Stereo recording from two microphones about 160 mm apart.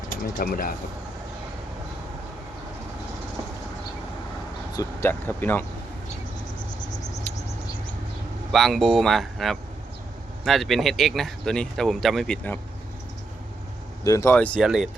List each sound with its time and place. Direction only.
0.3 s speech: 60° left (ahead or behind)
4.7 s speech: 20° left (ahead or behind)
8.5 s speech: centre (ahead or behind)
14.0 s speech: 20° left (ahead or behind)
14.6 s speech: 5° right (ahead or behind)